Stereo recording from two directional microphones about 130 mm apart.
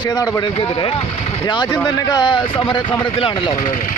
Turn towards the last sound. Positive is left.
turn(degrees=85)